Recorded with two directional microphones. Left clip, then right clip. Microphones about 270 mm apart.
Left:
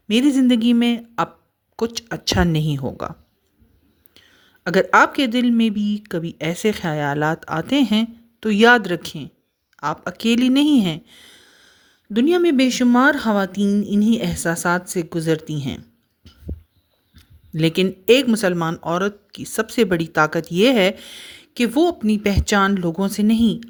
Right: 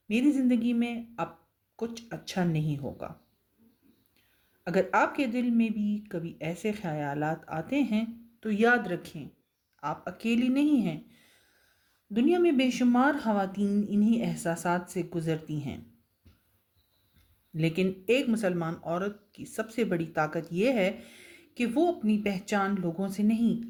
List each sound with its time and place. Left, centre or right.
0.1 s speech: left
4.6 s speech: left
16.2 s heart sounds: left
17.5 s speech: left